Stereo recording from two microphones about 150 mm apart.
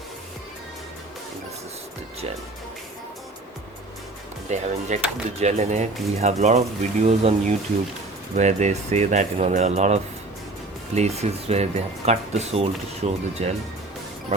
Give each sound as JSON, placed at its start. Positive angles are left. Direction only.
{"t": 4.4, "sound": "speech", "side_deg": -50}